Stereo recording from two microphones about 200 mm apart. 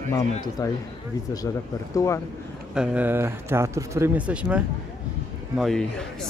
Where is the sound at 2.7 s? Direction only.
5° right (ahead or behind).